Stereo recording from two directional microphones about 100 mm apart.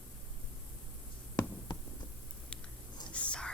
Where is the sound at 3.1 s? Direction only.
10° left (ahead or behind).